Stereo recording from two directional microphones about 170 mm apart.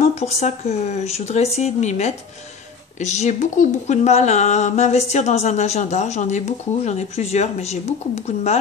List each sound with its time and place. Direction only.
0.0 s speech: 40° left (ahead or behind)